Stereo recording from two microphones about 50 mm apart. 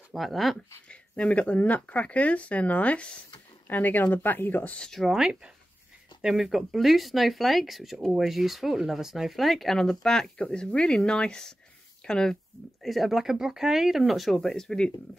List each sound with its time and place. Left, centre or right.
0.1 s speech: centre
0.8 s speech: left
3.6 s speech: left
4.7 s speech: centre
5.2 s speech: centre
6.2 s speech: centre
8.0 s speech: centre
8.3 s speech: centre
12.8 s speech: centre